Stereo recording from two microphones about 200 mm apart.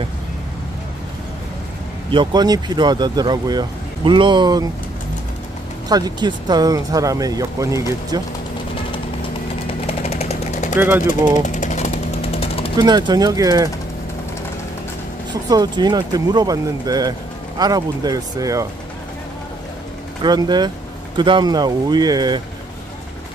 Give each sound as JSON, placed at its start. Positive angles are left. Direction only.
{"t": 2.0, "sound": "speech", "side_deg": -20}
{"t": 5.9, "sound": "speech", "side_deg": -20}
{"t": 9.8, "sound": "jackhammer", "side_deg": 30}
{"t": 12.7, "sound": "speech", "side_deg": -20}
{"t": 15.5, "sound": "speech", "side_deg": -20}
{"t": 20.2, "sound": "speech", "side_deg": -20}